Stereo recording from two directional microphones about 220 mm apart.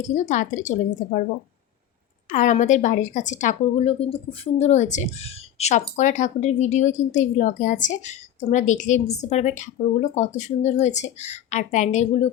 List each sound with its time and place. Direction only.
0.1 s a woman's voice: 35° left (ahead or behind)
2.3 s a woman's voice: 35° left (ahead or behind)